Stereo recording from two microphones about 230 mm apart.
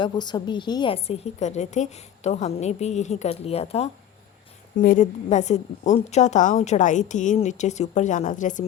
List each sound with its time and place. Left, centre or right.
0.0 s a woman's voice: centre